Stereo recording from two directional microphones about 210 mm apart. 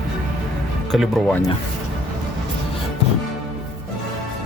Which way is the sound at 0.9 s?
Centre (ahead or behind).